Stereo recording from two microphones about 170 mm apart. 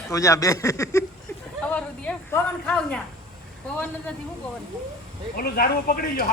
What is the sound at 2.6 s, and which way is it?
Speech, 5° left (ahead or behind).